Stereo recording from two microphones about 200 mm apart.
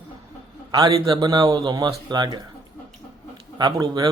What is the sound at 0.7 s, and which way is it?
A man's voice, 20° right (ahead or behind).